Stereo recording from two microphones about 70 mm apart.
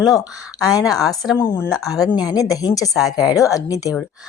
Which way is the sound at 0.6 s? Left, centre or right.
Left.